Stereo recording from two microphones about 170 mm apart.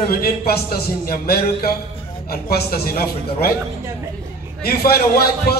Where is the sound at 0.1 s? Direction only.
65° left (ahead or behind).